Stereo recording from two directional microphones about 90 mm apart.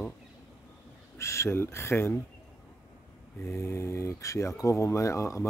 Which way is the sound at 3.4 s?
30° left (ahead or behind).